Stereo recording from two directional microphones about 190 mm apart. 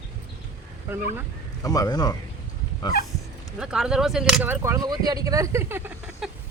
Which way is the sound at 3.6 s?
5° right (ahead or behind).